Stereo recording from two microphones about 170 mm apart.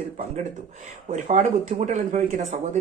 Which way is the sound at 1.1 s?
45° right (ahead or behind).